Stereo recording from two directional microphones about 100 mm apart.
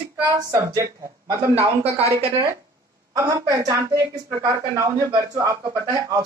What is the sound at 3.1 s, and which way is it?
A woman's voice, 35° right (ahead or behind).